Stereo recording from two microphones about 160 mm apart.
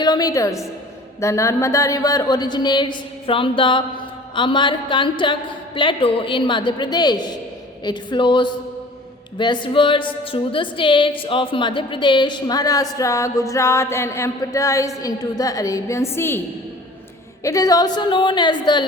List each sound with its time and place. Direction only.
0.0 s a woman's voice: 25° left (ahead or behind)
17.4 s a woman's voice: 20° left (ahead or behind)